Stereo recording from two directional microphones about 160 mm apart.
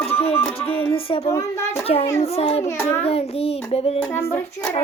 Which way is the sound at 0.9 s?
35° left (ahead or behind).